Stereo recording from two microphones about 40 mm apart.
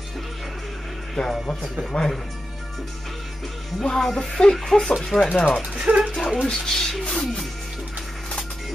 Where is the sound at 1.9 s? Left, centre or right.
Left.